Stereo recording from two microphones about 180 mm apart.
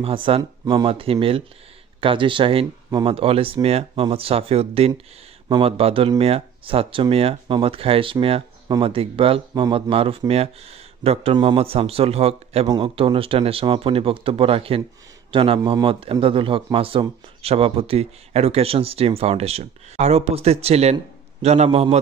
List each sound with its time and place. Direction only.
0.0 s a man's voice: 30° right (ahead or behind)